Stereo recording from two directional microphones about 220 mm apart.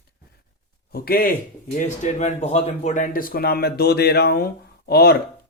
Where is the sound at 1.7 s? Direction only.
30° left (ahead or behind).